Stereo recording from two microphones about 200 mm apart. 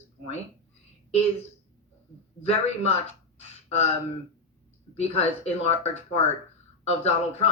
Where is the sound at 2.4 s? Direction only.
30° left (ahead or behind).